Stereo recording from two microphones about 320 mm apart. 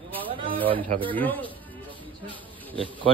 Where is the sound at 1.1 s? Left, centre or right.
Centre.